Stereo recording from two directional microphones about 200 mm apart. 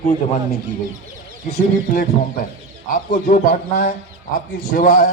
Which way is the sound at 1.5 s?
40° left (ahead or behind).